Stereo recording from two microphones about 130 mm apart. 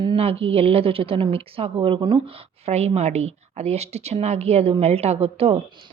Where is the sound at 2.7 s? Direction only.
55° right (ahead or behind).